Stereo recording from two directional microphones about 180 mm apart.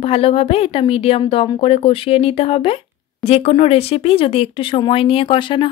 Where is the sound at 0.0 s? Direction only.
35° left (ahead or behind).